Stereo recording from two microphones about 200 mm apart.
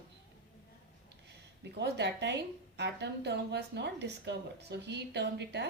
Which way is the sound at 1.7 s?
60° right (ahead or behind).